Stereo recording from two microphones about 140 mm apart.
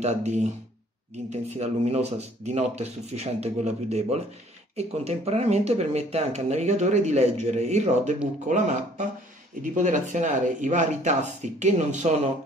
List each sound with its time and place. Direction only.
0.0 s speech: 55° right (ahead or behind)